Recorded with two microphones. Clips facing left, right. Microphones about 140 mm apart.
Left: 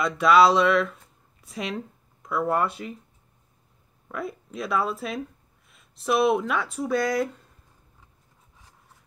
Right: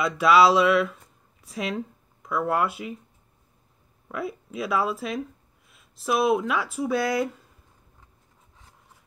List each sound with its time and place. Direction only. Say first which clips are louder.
0.0 s speech: even; 5° right (ahead or behind)
4.1 s speech: right 1 dB; 5° right (ahead or behind)